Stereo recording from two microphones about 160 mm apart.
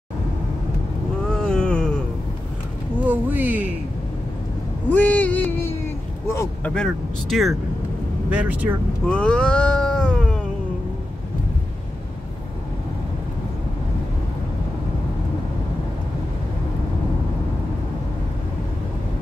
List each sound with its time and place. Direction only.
1.3 s cat: 5° left (ahead or behind)
3.1 s a sound: 10° right (ahead or behind)
4.9 s a sound: 10° left (ahead or behind)
6.3 s vehicle: 20° left (ahead or behind)
6.7 s speech: 5° left (ahead or behind)
9.0 s cat: 5° left (ahead or behind)